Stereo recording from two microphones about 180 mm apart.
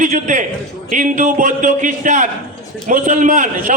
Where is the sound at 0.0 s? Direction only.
45° right (ahead or behind).